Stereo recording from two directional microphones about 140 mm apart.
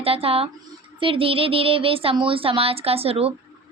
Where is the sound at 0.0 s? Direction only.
45° right (ahead or behind).